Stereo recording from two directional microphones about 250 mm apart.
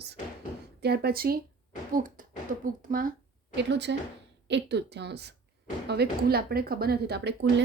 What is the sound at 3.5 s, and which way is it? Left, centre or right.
A woman's voice, right.